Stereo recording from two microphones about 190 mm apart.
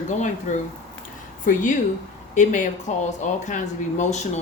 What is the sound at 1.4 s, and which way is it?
Speech, 45° left (ahead or behind).